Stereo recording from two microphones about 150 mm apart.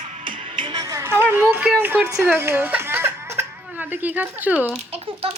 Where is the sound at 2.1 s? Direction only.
15° right (ahead or behind).